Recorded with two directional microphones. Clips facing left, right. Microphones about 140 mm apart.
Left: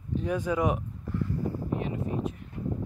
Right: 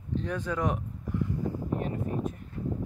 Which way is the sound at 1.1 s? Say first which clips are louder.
Even; 15° right (ahead or behind).